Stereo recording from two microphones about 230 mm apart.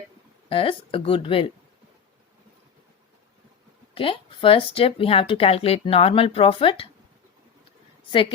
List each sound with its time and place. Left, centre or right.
0.4 s speech: left
3.9 s speech: left